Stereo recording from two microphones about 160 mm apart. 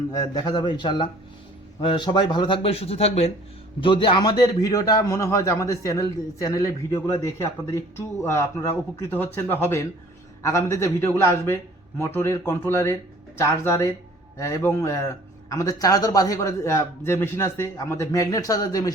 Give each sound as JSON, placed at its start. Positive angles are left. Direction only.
{"t": 0.1, "sound": "a man's voice", "side_deg": 25}